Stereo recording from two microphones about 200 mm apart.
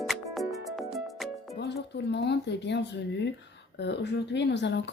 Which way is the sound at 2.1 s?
60° left (ahead or behind).